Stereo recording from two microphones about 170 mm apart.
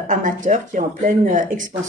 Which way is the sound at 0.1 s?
50° right (ahead or behind).